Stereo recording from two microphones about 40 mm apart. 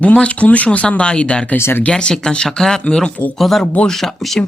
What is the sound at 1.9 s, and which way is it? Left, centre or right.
Speech, centre.